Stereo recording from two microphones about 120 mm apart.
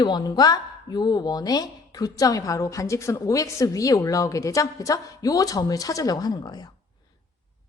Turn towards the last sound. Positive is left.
turn(degrees=35)  # may be behind; listen again after turning